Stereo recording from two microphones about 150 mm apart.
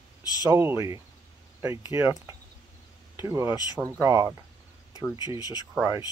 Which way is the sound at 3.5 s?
25° left (ahead or behind).